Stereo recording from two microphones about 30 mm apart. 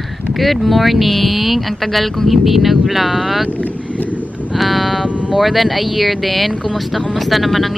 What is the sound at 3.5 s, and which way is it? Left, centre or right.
Speech, left.